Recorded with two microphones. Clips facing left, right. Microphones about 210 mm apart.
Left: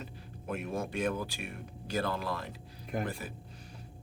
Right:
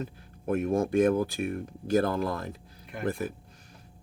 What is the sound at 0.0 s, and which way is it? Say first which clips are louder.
Speech: right 9 dB; 45° right (ahead or behind).